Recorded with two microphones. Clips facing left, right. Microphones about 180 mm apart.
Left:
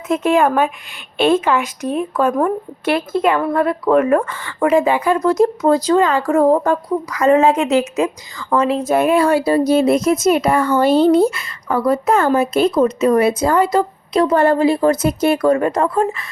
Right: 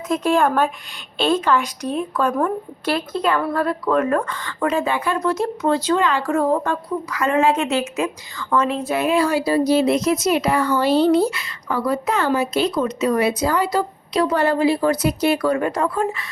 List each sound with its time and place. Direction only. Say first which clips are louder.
0.1 s a woman's voice: left 3 dB; 5° left (ahead or behind)
3.4 s speech: left 4 dB; 20° left (ahead or behind)
5.2 s a woman's voice: left 6 dB; 40° left (ahead or behind)
7.4 s speech: left 5 dB; 15° left (ahead or behind)
8.4 s a woman's voice: left 3 dB; 35° left (ahead or behind)
8.7 s speech: left 5 dB; 45° left (ahead or behind)